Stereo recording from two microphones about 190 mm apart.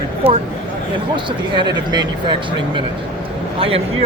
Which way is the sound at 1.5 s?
25° right (ahead or behind).